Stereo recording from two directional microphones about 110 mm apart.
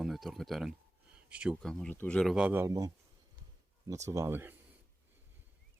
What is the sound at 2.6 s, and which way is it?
Speech, 30° right (ahead or behind).